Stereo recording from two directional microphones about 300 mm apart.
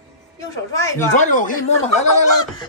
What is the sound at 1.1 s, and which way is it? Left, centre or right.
Speech, left.